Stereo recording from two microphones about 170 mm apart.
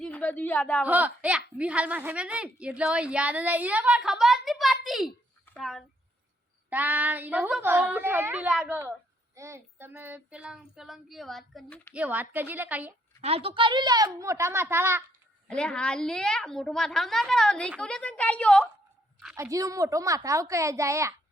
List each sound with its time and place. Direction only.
0.0 s a woman's voice: 10° left (ahead or behind)
0.9 s a woman's voice: 10° right (ahead or behind)
6.7 s speech: 10° right (ahead or behind)
11.9 s speech: 10° right (ahead or behind)
13.2 s speech: 35° right (ahead or behind); by 15.0 s 15° right (ahead or behind)
15.4 s a woman's voice: 5° left (ahead or behind)
19.4 s speech: 20° right (ahead or behind)